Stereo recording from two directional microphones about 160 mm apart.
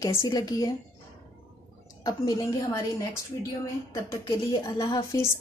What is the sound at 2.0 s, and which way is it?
Speech, 25° left (ahead or behind).